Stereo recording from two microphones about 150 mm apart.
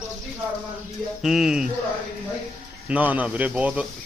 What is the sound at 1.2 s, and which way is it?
Speech, 5° right (ahead or behind).